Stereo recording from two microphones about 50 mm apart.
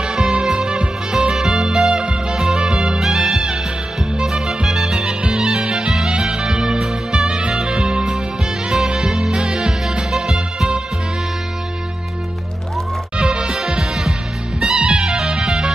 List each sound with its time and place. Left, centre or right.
0.0 s music: centre
13.2 s music: centre